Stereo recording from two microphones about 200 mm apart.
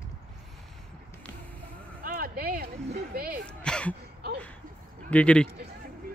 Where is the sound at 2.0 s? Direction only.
45° right (ahead or behind).